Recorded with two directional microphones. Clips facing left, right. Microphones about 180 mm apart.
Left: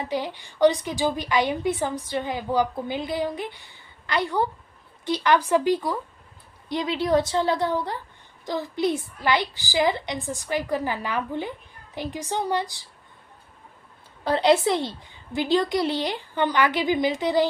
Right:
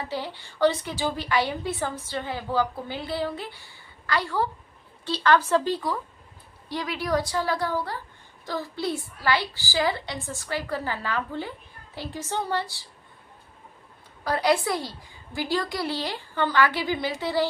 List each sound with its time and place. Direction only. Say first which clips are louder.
0.1 s a woman's voice: left 4 dB; 15° left (ahead or behind)
14.3 s a woman's voice: left 4 dB; 25° left (ahead or behind)